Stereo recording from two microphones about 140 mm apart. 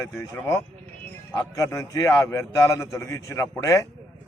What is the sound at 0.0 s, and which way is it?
A man's voice, 20° left (ahead or behind).